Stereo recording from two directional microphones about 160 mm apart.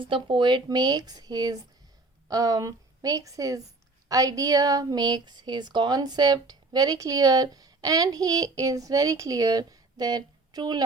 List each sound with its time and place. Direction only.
0.0 s a woman's voice: 30° right (ahead or behind)